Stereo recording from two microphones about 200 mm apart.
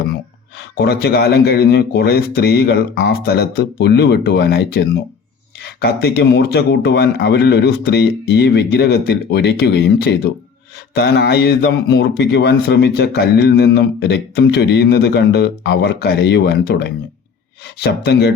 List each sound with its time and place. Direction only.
0.8 s speech: 55° left (ahead or behind)